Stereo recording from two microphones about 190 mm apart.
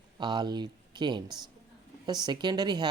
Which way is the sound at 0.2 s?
25° right (ahead or behind).